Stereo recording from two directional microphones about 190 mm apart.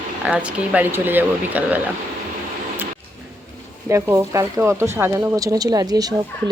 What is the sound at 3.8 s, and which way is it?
Speech, 15° right (ahead or behind).